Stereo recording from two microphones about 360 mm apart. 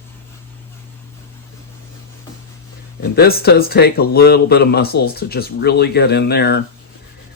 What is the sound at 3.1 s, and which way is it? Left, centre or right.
Speech, left.